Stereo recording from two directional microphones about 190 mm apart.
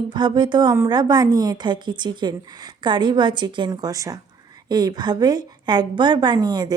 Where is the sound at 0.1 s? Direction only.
25° right (ahead or behind).